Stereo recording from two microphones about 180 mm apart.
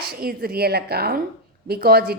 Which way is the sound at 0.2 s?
55° right (ahead or behind).